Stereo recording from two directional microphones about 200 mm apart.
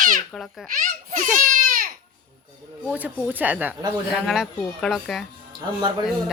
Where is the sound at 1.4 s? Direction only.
45° right (ahead or behind).